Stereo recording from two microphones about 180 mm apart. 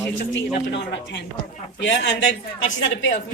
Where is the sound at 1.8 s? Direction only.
90° left.